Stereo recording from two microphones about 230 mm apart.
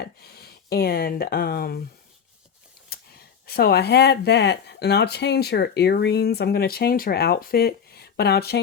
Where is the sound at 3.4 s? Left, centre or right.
Left.